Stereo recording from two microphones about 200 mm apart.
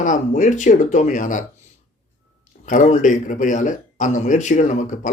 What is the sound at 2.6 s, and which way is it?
Speech, 40° left (ahead or behind).